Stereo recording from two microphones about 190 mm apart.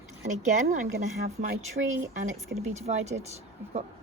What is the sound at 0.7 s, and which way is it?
A woman's voice, 40° right (ahead or behind).